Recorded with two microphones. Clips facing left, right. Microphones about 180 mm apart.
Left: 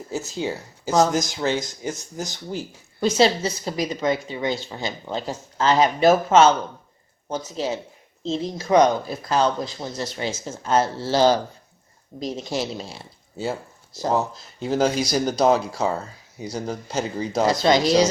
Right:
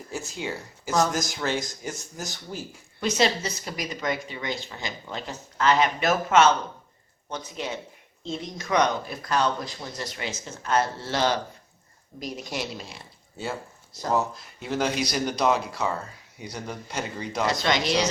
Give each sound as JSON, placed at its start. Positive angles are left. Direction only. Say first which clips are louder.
{"t": 0.1, "sound": "speech", "louder": "left 5 dB", "side_deg": 25}
{"t": 3.0, "sound": "speech", "louder": "left 5 dB", "side_deg": 30}
{"t": 14.0, "sound": "speech", "louder": "left 3 dB", "side_deg": 30}